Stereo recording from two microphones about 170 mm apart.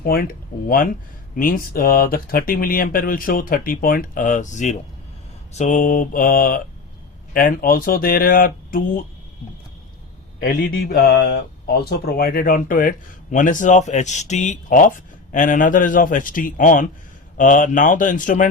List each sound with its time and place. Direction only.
0.0 s speech: 60° left (ahead or behind)
10.4 s speech: 55° left (ahead or behind)